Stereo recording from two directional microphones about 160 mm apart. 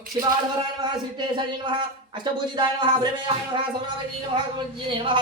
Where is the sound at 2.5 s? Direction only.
30° right (ahead or behind).